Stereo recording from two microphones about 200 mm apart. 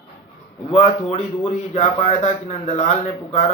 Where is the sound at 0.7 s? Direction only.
30° left (ahead or behind).